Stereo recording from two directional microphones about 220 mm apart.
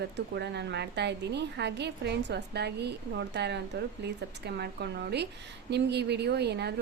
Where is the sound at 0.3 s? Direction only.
50° right (ahead or behind).